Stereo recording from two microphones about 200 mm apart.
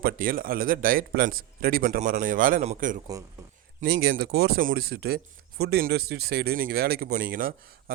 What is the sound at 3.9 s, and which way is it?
Speech, 55° right (ahead or behind).